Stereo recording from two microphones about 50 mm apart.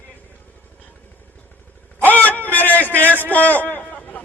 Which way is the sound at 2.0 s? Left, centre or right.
Left.